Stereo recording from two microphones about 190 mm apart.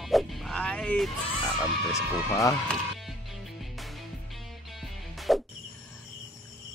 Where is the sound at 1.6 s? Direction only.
15° left (ahead or behind).